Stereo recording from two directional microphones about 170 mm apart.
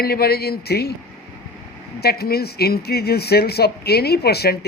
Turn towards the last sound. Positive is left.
turn(degrees=70)  # may be behind; listen again after turning